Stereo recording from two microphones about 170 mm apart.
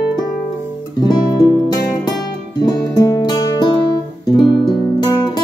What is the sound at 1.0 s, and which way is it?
Music, 25° left (ahead or behind).